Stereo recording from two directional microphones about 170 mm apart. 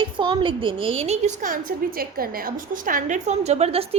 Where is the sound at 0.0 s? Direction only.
30° right (ahead or behind); by 1.5 s 45° right (ahead or behind).